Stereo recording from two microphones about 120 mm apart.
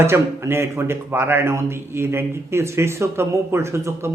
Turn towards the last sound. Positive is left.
turn(degrees=-20)  # may be behind; listen again after turning